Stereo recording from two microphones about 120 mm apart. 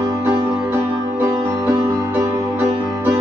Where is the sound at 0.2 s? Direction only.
15° right (ahead or behind).